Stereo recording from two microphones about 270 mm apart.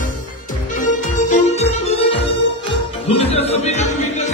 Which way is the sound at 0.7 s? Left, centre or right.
Left.